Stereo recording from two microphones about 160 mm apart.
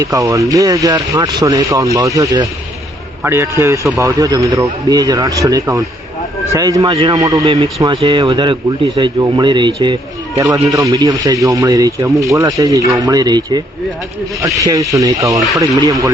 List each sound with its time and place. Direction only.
0.0 s a man's voice: 20° right (ahead or behind)
7.2 s speech: 20° right (ahead or behind)
7.4 s speech: 35° right (ahead or behind)